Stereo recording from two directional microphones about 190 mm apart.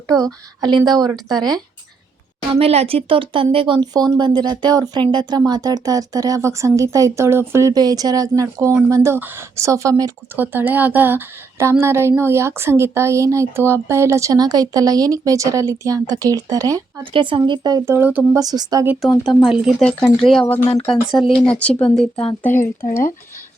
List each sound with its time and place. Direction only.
0.2 s speech: 20° right (ahead or behind)
2.5 s speech: 30° right (ahead or behind); by 18.3 s 10° right (ahead or behind)
18.3 s speech: 20° right (ahead or behind)
19.2 s speech: centre (ahead or behind)
22.5 s speech: 45° left (ahead or behind)